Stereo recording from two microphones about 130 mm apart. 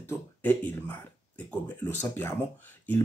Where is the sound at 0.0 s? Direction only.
15° left (ahead or behind).